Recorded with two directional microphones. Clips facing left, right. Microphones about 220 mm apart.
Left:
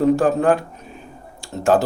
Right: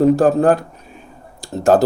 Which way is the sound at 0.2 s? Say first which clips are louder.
Right 3 dB; 35° right (ahead or behind).